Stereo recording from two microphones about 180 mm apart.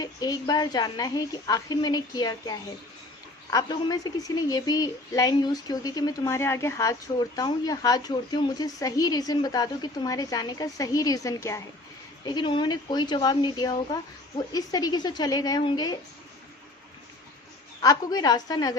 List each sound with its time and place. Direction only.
0.0 s a woman's voice: 20° left (ahead or behind)
17.8 s a woman's voice: 20° left (ahead or behind)